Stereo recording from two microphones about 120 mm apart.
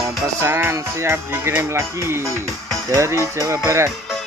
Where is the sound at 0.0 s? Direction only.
20° right (ahead or behind).